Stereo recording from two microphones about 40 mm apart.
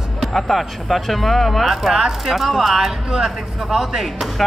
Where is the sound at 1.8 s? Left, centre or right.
Centre.